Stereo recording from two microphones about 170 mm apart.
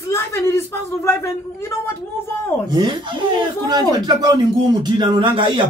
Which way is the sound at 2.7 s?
25° right (ahead or behind).